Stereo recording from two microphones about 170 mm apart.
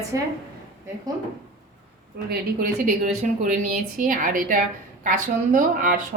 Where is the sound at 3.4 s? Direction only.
50° right (ahead or behind).